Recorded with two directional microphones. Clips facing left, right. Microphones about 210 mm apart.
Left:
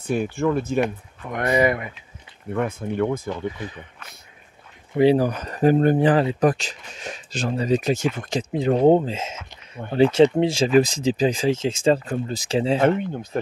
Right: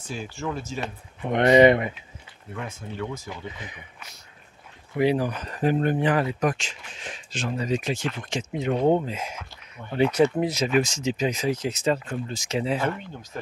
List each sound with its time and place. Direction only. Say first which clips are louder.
0.0 s speech: left 10 dB; 60° left (ahead or behind)
1.2 s speech: right 5 dB; 25° right (ahead or behind)
2.5 s speech: left 10 dB; 55° left (ahead or behind)
4.9 s speech: left 6 dB; 30° left (ahead or behind)
13.1 s speech: left 10 dB; 60° left (ahead or behind)